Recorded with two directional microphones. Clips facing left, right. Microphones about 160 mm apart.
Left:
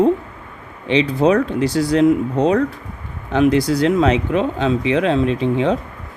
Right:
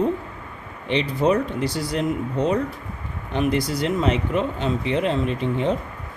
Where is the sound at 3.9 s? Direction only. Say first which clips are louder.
Left 5 dB; 90° left.